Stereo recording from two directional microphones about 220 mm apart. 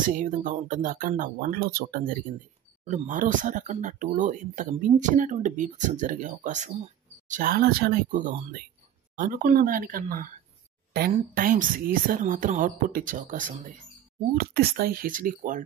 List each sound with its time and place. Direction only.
0.0 s speech: 35° right (ahead or behind)